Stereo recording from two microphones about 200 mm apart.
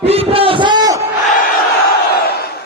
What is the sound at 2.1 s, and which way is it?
Crowd, 50° left (ahead or behind).